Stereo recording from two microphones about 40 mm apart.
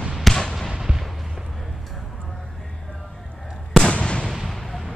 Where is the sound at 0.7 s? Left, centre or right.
Centre.